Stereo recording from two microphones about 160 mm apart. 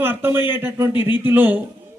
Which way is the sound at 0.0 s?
15° right (ahead or behind).